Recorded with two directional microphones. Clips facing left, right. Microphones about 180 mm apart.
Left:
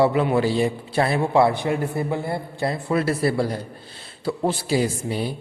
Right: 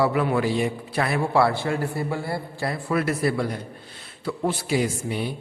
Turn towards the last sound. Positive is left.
turn(degrees=35)  # may be behind; listen again after turning